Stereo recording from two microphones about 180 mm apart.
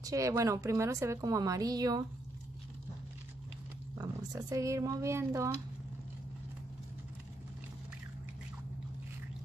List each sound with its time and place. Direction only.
0.0 s speech: 15° right (ahead or behind)
4.0 s speech: 20° right (ahead or behind)